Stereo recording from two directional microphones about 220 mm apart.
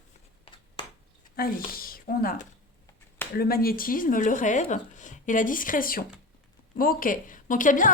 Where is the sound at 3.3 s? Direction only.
45° left (ahead or behind).